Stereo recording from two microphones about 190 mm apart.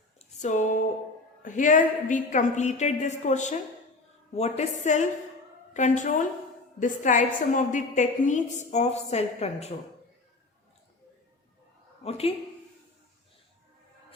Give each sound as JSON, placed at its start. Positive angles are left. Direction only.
{"t": 0.2, "sound": "a sound", "side_deg": 40}
{"t": 1.4, "sound": "a woman's voice", "side_deg": 45}
{"t": 12.0, "sound": "a woman's voice", "side_deg": 30}